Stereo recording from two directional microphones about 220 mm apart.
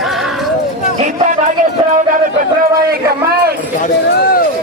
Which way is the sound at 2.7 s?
45° right (ahead or behind).